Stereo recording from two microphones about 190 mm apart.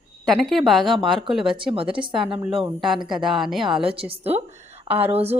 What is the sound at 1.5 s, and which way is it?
Speech, 25° right (ahead or behind).